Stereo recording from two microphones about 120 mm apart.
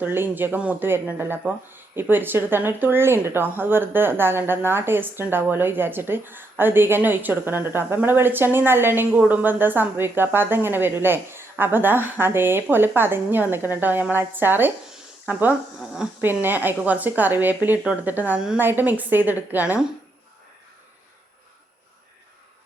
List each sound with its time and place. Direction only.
0.0 s speech: 15° right (ahead or behind)